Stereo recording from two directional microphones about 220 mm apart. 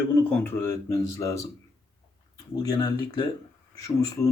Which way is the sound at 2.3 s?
15° left (ahead or behind).